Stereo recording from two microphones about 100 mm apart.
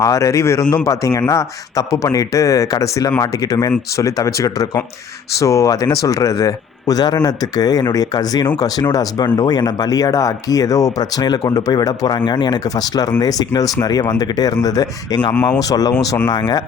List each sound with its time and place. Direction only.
0.0 s speech: 30° left (ahead or behind)